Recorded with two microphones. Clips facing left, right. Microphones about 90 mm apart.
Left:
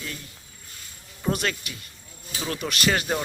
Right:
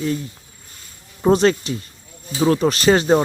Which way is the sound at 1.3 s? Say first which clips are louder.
Right 13 dB; 30° right (ahead or behind).